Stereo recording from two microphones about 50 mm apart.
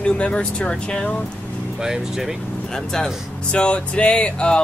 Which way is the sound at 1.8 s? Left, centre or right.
Centre.